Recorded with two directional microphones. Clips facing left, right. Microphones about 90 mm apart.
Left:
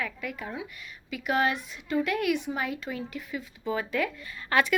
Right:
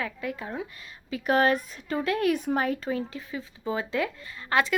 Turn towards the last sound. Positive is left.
turn(degrees=-25)  # may be behind; listen again after turning